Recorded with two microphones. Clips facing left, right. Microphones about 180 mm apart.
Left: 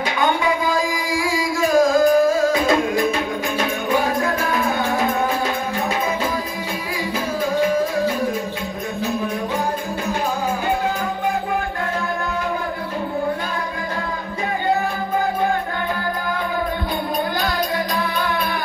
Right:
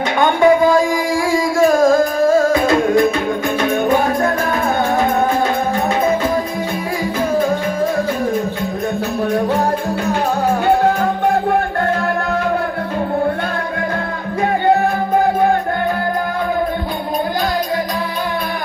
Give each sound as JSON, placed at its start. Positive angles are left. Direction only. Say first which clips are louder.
{"t": 0.2, "sound": "music", "louder": "right 9 dB", "side_deg": -50}